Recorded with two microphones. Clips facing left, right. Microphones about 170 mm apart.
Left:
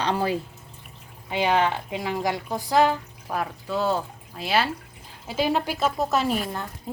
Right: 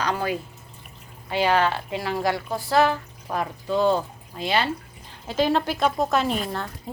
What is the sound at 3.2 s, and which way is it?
Speech, centre (ahead or behind).